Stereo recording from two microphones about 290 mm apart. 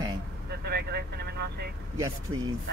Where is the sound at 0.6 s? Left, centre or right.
Right.